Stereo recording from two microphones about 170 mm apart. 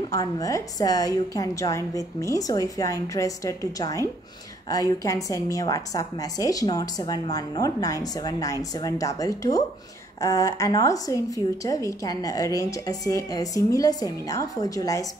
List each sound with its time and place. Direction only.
0.1 s speech: 20° left (ahead or behind)